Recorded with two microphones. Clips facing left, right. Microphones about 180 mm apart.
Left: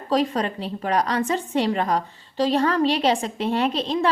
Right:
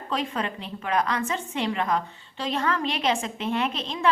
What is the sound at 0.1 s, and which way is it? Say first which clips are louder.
A woman's voice: left 7 dB; 35° left (ahead or behind).